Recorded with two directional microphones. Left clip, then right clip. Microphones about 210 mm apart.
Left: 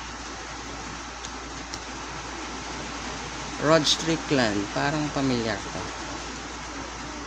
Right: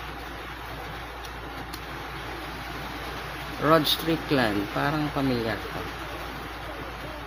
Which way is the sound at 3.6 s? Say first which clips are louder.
Left 1 dB; centre (ahead or behind).